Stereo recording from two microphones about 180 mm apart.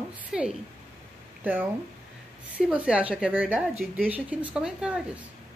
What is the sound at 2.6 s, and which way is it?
A woman's voice, 5° right (ahead or behind).